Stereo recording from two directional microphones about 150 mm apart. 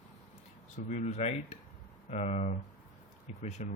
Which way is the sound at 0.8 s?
55° left (ahead or behind).